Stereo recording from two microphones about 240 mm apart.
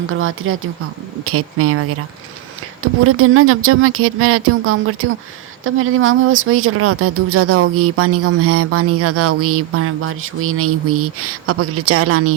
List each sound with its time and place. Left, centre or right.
0.1 s speech: right